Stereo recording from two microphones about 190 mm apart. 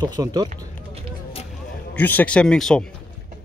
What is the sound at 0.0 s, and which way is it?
Speech, 20° right (ahead or behind).